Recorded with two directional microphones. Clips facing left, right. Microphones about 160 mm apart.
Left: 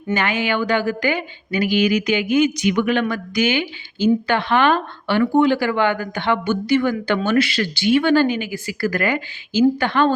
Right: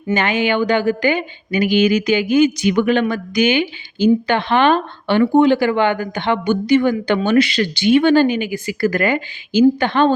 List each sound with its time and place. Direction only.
0.1 s speech: 20° right (ahead or behind)
3.3 s speech: 20° right (ahead or behind)